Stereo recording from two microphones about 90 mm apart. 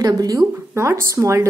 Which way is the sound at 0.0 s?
45° right (ahead or behind).